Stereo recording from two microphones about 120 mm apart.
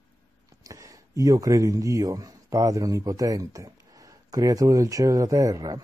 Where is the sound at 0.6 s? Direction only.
30° right (ahead or behind).